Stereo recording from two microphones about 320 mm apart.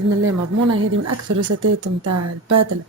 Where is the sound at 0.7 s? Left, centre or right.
Right.